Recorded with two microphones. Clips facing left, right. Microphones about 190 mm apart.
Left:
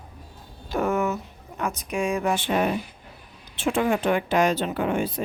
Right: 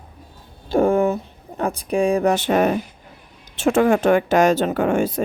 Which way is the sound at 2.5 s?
45° right (ahead or behind).